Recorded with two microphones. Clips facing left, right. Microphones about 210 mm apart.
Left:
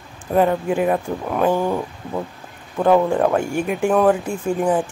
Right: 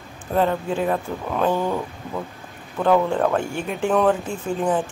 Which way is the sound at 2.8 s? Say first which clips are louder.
Left 3 dB; 15° left (ahead or behind).